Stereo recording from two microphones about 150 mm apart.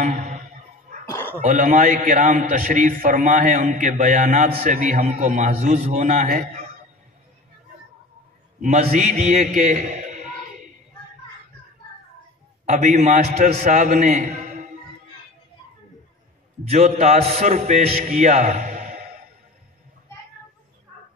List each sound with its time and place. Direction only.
1.1 s a sound: 15° left (ahead or behind)
1.4 s a man's voice: 60° right (ahead or behind)
8.5 s a man's voice: 50° right (ahead or behind)
12.6 s a man's voice: 55° right (ahead or behind)
16.6 s a man's voice: 45° right (ahead or behind)